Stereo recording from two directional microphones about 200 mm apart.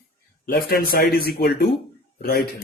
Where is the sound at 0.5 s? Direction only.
50° left (ahead or behind).